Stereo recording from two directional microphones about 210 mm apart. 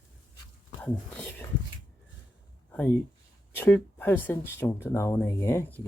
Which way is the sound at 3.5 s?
10° left (ahead or behind).